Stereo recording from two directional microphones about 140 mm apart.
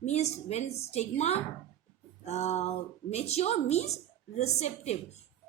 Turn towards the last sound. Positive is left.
turn(degrees=55)  # may be behind; listen again after turning